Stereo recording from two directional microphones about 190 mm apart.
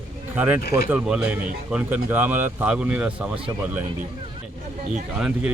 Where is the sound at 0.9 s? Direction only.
5° right (ahead or behind).